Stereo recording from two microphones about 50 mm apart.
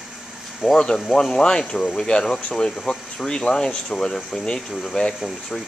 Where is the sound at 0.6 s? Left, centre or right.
Centre.